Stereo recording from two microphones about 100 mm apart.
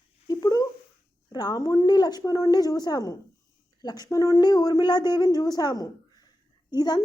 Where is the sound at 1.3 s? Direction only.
45° left (ahead or behind).